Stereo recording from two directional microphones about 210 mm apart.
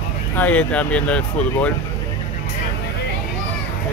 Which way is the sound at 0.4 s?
5° left (ahead or behind).